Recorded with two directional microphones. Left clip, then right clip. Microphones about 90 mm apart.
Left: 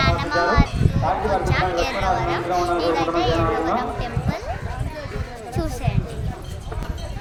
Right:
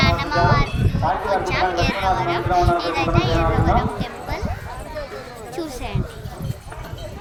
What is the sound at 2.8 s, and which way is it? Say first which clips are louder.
Speech: left 1 dB; 20° left (ahead or behind).